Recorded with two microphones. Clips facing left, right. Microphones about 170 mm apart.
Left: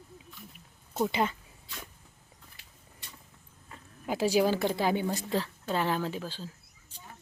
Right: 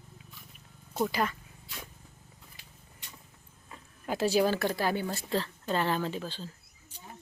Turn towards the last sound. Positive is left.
turn(degrees=10)  # may be behind; listen again after turning